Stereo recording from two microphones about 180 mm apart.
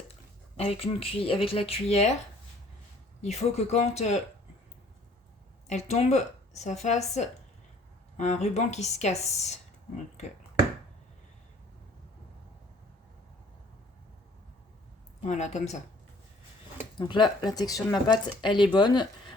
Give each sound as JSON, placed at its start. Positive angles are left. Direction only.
{"t": 0.1, "sound": "speech", "side_deg": 35}
{"t": 3.2, "sound": "a woman's voice", "side_deg": 35}
{"t": 5.6, "sound": "a woman's voice", "side_deg": 40}
{"t": 15.2, "sound": "a woman's voice", "side_deg": 40}
{"t": 17.0, "sound": "speech", "side_deg": 25}